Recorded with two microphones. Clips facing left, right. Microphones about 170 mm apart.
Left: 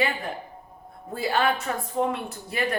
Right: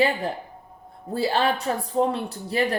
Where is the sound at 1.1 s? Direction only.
35° right (ahead or behind).